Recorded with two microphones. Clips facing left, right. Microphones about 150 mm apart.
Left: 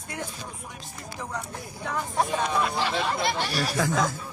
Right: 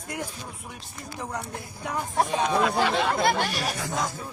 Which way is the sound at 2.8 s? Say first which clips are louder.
Right 3 dB; 50° right (ahead or behind).